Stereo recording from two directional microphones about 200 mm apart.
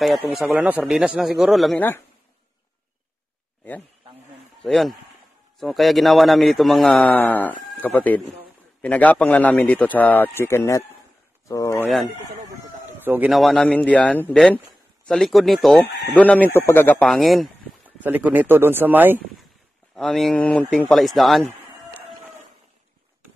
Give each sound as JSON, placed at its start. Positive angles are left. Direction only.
{"t": 0.0, "sound": "a man's voice", "side_deg": 0}
{"t": 4.6, "sound": "a man's voice", "side_deg": 0}
{"t": 12.1, "sound": "chicken", "side_deg": -40}
{"t": 13.0, "sound": "a man's voice", "side_deg": -10}
{"t": 17.1, "sound": "speech", "side_deg": 0}
{"t": 20.0, "sound": "a man's voice", "side_deg": 0}